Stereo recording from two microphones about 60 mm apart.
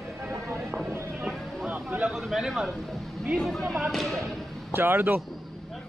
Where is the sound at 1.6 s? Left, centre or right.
Right.